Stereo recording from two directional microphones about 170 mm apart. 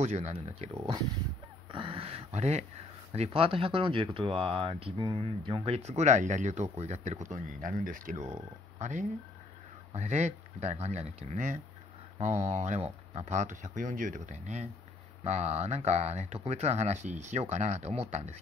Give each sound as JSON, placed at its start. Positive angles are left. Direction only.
{"t": 0.0, "sound": "speech", "side_deg": -40}
{"t": 1.7, "sound": "speech", "side_deg": -30}